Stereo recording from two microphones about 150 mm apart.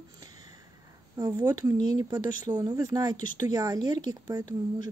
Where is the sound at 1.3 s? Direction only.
20° right (ahead or behind).